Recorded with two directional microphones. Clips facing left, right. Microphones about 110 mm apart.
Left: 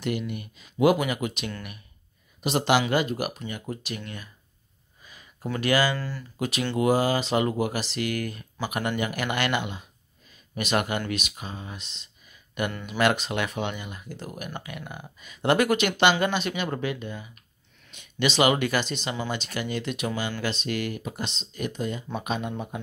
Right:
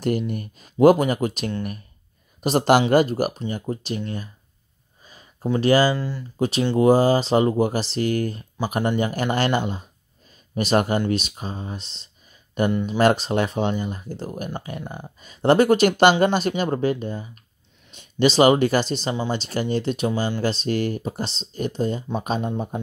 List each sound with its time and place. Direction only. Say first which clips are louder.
0.0 s speech: right 6 dB; 40° right (ahead or behind)
5.0 s a sound: right 7 dB; 35° right (ahead or behind)
5.9 s speech: right 5 dB; 20° right (ahead or behind)
6.8 s speech: right 6 dB; 30° right (ahead or behind)